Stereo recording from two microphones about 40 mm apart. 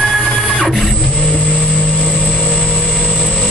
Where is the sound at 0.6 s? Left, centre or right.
Centre.